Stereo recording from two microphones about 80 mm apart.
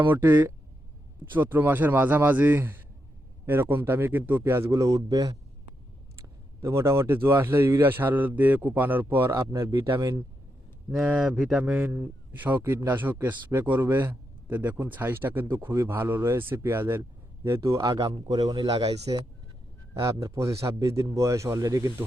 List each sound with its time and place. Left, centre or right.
0.1 s a man's voice: right
4.7 s speech: right
6.6 s a man's voice: right
10.0 s speech: right
11.0 s a man's voice: centre; by 19.2 s right
19.9 s speech: right